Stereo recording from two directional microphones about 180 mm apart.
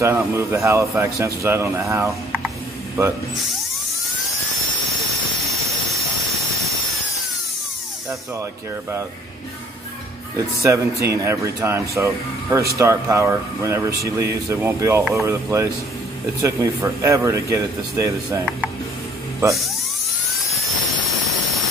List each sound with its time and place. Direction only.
0.0 s speech: 15° right (ahead or behind)
10.3 s speech: 15° right (ahead or behind)